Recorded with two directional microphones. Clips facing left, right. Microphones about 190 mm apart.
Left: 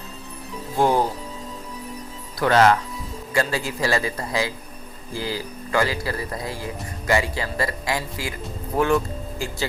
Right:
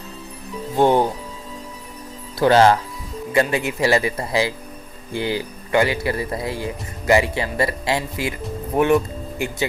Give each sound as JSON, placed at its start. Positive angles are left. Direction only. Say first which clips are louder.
{"t": 0.8, "sound": "speech", "louder": "right 4 dB", "side_deg": -25}
{"t": 2.4, "sound": "speech", "louder": "right 3 dB", "side_deg": -30}